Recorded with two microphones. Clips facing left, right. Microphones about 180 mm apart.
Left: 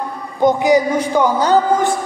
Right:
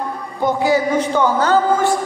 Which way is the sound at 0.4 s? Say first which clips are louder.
Left 4 dB; 20° left (ahead or behind).